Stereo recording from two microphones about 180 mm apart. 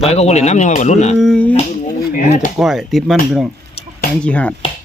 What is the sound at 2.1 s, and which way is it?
Speech, 45° left (ahead or behind).